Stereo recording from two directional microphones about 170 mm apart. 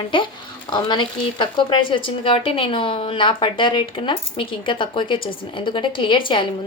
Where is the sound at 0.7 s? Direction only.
25° left (ahead or behind).